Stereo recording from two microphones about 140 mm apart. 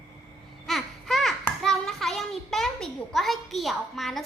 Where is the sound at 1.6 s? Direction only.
Centre (ahead or behind).